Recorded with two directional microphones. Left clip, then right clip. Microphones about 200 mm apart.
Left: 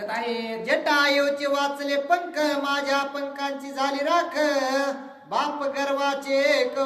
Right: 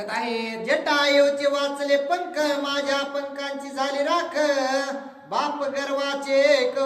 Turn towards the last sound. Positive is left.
turn(degrees=20)  # may be behind; listen again after turning